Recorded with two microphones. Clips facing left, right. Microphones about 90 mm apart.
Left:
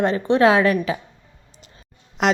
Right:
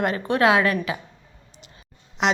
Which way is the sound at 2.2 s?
45° left (ahead or behind).